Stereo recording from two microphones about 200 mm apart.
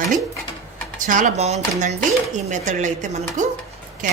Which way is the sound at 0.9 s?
40° right (ahead or behind).